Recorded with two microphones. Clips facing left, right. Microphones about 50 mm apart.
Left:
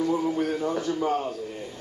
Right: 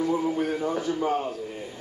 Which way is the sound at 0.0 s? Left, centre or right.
Centre.